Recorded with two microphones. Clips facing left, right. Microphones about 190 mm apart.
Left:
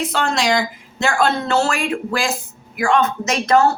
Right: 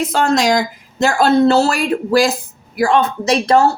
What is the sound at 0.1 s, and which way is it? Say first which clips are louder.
Speech: right 6 dB; 45° right (ahead or behind).